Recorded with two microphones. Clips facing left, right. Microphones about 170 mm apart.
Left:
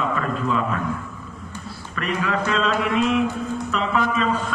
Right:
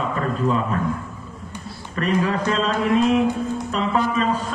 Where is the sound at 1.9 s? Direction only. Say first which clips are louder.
Right 3 dB; 35° right (ahead or behind).